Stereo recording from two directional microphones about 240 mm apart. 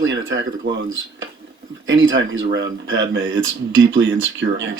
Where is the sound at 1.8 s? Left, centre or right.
Right.